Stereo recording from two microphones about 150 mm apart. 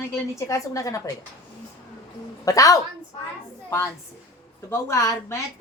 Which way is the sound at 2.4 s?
20° left (ahead or behind).